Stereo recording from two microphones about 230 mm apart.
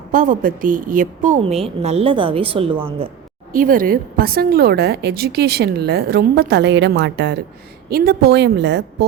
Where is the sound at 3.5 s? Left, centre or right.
Right.